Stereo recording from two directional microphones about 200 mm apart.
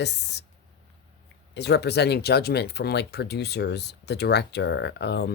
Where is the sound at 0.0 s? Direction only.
55° left (ahead or behind).